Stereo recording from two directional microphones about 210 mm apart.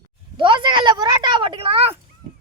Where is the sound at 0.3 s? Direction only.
25° right (ahead or behind).